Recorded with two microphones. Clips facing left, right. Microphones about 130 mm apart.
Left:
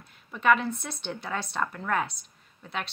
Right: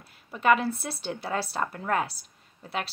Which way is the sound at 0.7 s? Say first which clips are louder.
Right 2 dB; 35° right (ahead or behind).